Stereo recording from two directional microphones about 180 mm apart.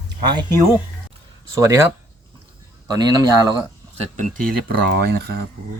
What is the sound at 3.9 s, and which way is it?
Speech, 40° right (ahead or behind).